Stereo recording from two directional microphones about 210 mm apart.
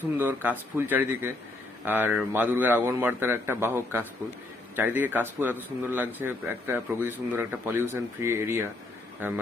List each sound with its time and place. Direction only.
0.2 s speech: 10° right (ahead or behind)